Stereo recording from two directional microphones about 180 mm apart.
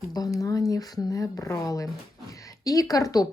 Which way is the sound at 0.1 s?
20° left (ahead or behind).